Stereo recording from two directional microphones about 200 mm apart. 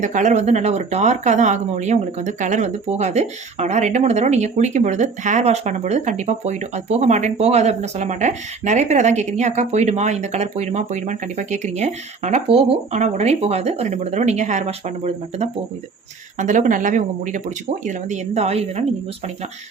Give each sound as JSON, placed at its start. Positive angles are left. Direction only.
{"t": 0.0, "sound": "speech", "side_deg": -40}